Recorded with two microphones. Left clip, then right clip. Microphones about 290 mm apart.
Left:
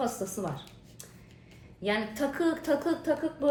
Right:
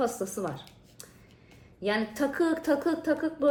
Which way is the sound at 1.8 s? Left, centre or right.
Right.